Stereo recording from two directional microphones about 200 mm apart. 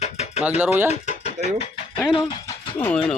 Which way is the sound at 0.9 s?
30° left (ahead or behind).